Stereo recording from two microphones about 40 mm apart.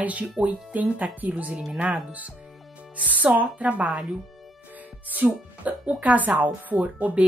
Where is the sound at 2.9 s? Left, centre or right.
Right.